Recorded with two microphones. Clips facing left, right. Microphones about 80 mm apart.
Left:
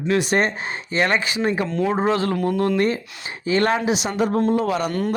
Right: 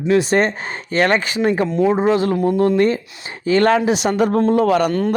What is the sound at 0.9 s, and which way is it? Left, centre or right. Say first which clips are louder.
Speech: right 4 dB; right.